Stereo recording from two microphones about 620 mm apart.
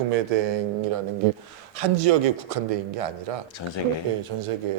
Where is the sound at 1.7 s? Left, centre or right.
Right.